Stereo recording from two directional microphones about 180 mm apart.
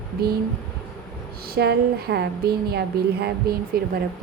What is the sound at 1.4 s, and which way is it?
A woman's voice, 65° right (ahead or behind).